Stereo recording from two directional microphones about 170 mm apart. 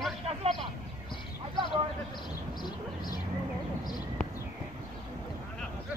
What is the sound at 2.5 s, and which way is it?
Vehicle, 25° left (ahead or behind).